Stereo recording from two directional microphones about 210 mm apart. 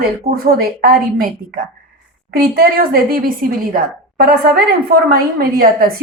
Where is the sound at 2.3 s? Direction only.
45° right (ahead or behind).